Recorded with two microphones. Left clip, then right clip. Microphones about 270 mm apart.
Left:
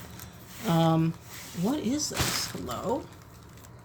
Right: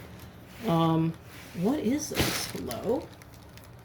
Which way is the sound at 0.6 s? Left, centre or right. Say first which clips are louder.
Even; left.